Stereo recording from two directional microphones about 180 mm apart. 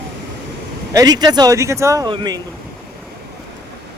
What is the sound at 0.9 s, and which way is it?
Speech, 20° right (ahead or behind).